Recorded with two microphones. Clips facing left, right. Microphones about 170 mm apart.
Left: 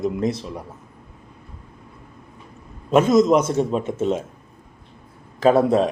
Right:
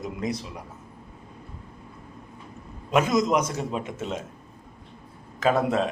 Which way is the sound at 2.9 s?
25° left (ahead or behind).